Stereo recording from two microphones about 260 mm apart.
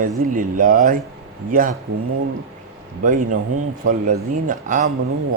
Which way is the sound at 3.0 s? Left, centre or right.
Right.